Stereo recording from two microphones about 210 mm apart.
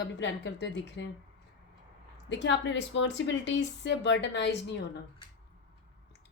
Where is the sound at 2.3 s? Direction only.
60° left (ahead or behind).